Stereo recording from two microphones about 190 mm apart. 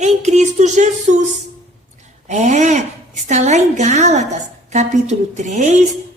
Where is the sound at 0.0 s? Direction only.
35° right (ahead or behind).